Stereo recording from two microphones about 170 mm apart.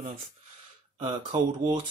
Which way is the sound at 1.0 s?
30° right (ahead or behind).